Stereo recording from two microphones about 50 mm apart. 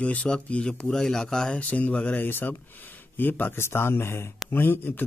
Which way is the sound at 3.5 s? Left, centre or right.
Left.